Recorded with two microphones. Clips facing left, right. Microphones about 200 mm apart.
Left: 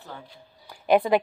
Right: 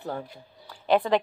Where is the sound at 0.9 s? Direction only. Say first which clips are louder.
Left 2 dB; 15° left (ahead or behind).